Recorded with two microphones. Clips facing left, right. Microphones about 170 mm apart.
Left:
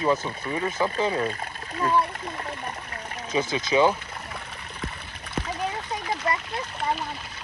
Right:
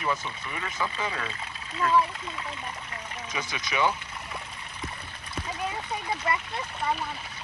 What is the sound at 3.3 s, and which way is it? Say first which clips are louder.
Speech: left 10 dB; 25° left (ahead or behind).